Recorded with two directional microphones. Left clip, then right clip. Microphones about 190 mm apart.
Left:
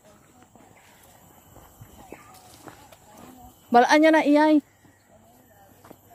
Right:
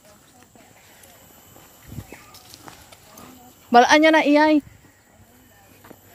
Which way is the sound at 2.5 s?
45° left (ahead or behind).